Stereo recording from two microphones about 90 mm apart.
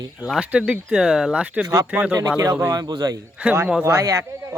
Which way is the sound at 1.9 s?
20° right (ahead or behind).